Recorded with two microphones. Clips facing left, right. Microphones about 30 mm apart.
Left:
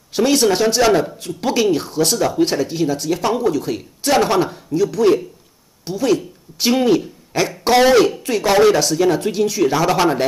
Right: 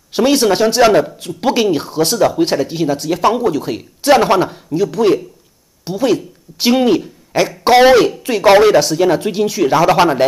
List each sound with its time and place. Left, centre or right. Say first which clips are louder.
0.1 s speech: right 3 dB; centre
7.0 s a sound: right 4 dB; centre
7.6 s speech: right 4 dB; centre